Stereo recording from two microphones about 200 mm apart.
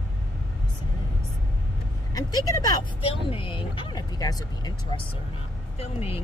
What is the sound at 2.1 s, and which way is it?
Speech, 20° left (ahead or behind).